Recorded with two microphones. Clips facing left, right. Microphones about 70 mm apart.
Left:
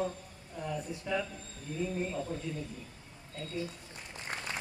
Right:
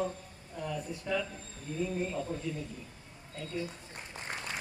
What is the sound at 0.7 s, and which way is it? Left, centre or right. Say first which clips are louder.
Speech: even; centre.